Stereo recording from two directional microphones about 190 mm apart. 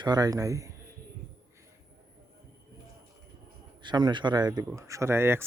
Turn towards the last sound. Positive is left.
turn(degrees=-15)  # may be behind; listen again after turning